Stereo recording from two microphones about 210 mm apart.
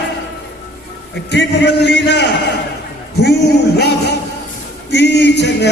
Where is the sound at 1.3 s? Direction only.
55° left (ahead or behind).